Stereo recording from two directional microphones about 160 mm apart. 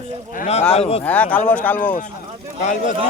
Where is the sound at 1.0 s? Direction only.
10° left (ahead or behind).